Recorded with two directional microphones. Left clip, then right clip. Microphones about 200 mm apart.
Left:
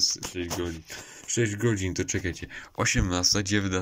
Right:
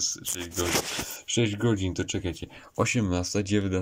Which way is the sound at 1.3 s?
10° right (ahead or behind).